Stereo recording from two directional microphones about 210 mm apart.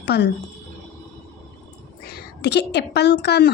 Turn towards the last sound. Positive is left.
turn(degrees=50)  # may be behind; listen again after turning